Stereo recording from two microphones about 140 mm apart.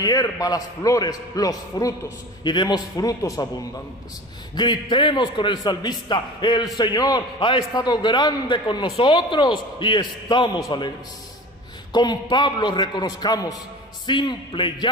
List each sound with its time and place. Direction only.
0.0 s a man's voice: 25° left (ahead or behind)
4.6 s a man's voice: 30° left (ahead or behind)
11.9 s a man's voice: 30° left (ahead or behind)